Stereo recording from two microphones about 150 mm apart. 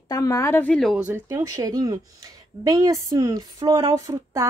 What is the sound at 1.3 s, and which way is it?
Speech, 25° right (ahead or behind).